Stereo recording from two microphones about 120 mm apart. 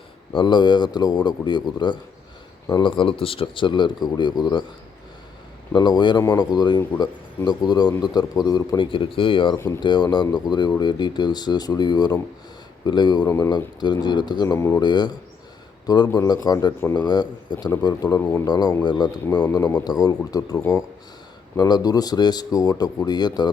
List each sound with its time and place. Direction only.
0.3 s a man's voice: 40° left (ahead or behind)
5.7 s a man's voice: 40° left (ahead or behind)
14.8 s a man's voice: 35° left (ahead or behind)
16.1 s a man's voice: 30° left (ahead or behind)
18.2 s speech: 20° left (ahead or behind)
18.4 s a man's voice: 35° left (ahead or behind)